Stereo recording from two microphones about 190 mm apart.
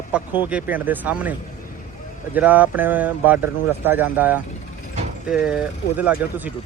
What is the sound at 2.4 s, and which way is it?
Speech, 10° right (ahead or behind).